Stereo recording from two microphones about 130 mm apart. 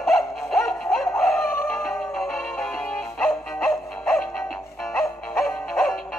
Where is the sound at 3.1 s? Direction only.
20° left (ahead or behind).